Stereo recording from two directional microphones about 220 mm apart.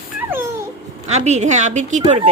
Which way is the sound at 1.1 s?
30° right (ahead or behind).